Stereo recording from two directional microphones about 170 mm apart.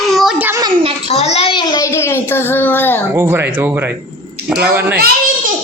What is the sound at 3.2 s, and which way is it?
A child's voice, 15° right (ahead or behind).